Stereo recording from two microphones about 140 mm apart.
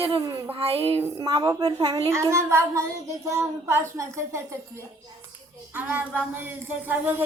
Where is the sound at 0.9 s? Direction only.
30° right (ahead or behind).